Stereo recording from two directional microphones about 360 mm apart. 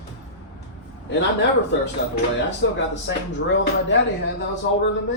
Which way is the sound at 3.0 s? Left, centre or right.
Left.